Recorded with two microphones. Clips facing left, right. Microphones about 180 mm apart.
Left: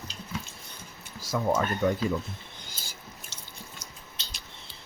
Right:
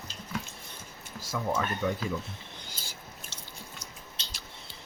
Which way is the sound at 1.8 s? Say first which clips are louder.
Left 5 dB; 45° left (ahead or behind).